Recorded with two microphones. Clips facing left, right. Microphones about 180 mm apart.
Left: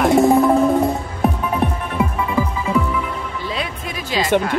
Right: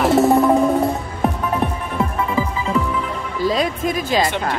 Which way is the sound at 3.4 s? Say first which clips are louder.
Right 12 dB; 40° right (ahead or behind).